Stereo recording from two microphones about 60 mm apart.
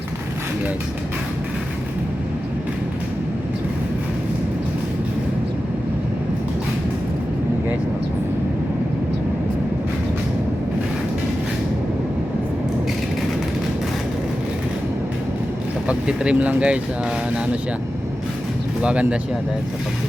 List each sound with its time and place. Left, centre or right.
15.9 s vehicle: centre
18.8 s speech: centre